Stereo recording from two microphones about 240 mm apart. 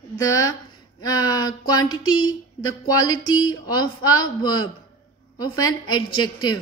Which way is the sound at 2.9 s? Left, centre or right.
Centre.